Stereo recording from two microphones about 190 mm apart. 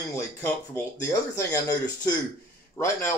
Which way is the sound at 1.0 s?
15° left (ahead or behind).